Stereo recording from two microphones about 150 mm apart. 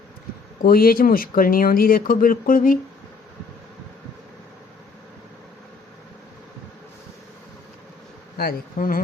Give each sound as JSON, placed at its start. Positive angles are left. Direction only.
{"t": 0.6, "sound": "speech", "side_deg": 75}
{"t": 8.4, "sound": "speech", "side_deg": 75}